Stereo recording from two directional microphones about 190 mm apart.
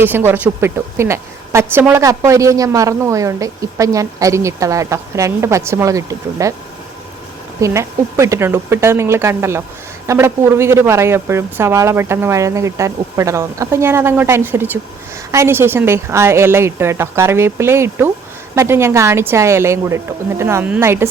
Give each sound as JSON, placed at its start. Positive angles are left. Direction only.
{"t": 0.0, "sound": "a woman's voice", "side_deg": -10}
{"t": 7.6, "sound": "a woman's voice", "side_deg": -15}